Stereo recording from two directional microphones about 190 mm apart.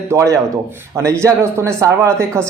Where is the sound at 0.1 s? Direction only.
15° right (ahead or behind).